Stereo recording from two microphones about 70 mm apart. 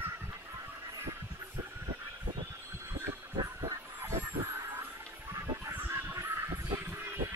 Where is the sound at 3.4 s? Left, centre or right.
Right.